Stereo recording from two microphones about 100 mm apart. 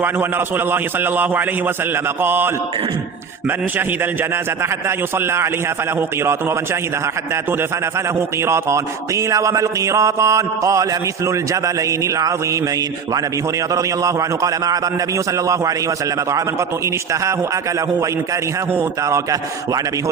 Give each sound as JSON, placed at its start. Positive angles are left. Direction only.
{"t": 0.0, "sound": "a man's voice", "side_deg": -20}
{"t": 3.8, "sound": "a man's voice", "side_deg": -20}
{"t": 7.9, "sound": "a man's voice", "side_deg": -25}
{"t": 13.7, "sound": "a man's voice", "side_deg": -35}